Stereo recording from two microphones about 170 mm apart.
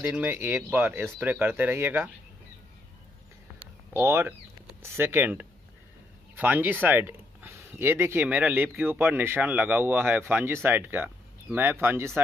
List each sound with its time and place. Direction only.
0.0 s speech: 10° right (ahead or behind)
3.5 s speech: 15° right (ahead or behind)